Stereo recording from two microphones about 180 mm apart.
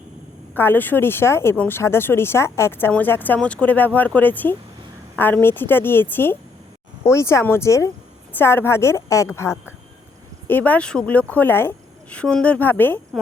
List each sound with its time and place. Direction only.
0.5 s speech: 10° left (ahead or behind)